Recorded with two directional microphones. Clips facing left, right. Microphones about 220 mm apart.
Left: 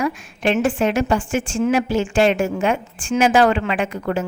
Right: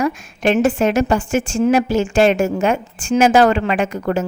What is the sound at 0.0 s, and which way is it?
A woman's voice, 45° right (ahead or behind).